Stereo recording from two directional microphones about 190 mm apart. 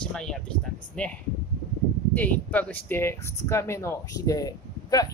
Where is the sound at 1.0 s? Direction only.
5° left (ahead or behind).